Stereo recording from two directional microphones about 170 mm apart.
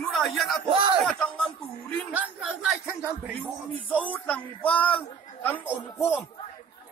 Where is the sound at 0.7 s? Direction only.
30° right (ahead or behind).